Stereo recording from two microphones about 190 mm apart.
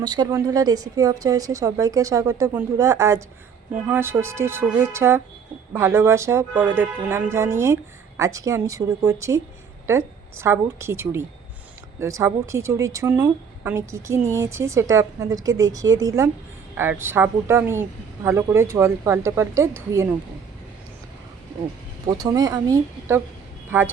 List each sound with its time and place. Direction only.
0.0 s a woman's voice: 20° right (ahead or behind)
22.2 s a woman's voice: 20° right (ahead or behind)